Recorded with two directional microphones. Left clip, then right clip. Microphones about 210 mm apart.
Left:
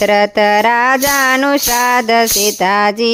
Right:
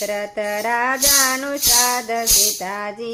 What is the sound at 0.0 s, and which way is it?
Music, 55° left (ahead or behind).